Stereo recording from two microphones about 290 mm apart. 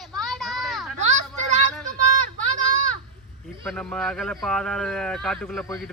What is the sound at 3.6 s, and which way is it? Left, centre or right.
Speech, centre.